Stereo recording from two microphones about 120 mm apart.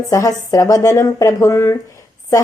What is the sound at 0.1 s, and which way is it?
Speech, 25° left (ahead or behind).